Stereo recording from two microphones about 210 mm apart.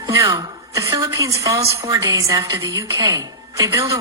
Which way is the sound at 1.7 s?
15° right (ahead or behind).